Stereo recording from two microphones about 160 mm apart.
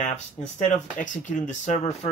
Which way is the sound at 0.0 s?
45° left (ahead or behind).